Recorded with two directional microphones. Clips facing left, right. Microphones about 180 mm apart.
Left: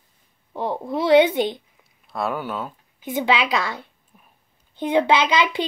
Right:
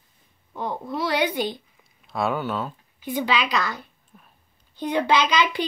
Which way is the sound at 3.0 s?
20° left (ahead or behind).